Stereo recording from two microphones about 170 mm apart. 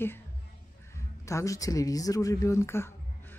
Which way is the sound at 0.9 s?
15° left (ahead or behind).